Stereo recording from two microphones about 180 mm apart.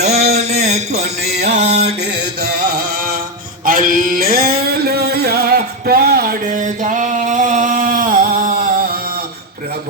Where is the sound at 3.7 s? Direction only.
50° right (ahead or behind).